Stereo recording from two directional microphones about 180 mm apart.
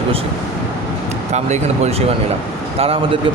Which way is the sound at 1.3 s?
40° right (ahead or behind).